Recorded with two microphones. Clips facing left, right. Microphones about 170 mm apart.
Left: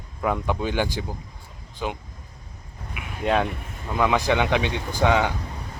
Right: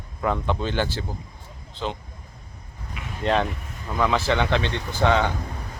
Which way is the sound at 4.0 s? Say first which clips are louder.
Left 1 dB; 15° left (ahead or behind).